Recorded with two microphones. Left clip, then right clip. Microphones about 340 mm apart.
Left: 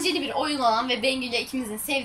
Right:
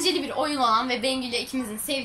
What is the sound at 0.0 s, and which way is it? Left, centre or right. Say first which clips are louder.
A woman's voice: even; centre.